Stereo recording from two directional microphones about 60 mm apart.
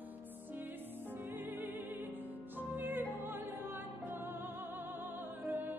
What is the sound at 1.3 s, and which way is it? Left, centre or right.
Music, right.